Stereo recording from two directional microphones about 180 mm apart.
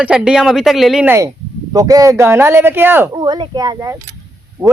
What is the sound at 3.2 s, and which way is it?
Speech, 25° right (ahead or behind).